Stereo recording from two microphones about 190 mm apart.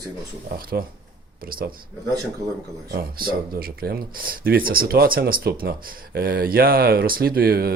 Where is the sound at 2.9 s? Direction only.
50° right (ahead or behind).